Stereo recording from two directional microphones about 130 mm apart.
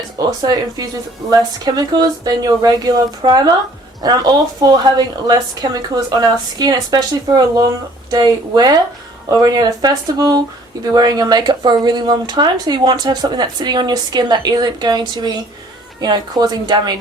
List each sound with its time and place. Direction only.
0.3 s a woman's voice: 30° right (ahead or behind)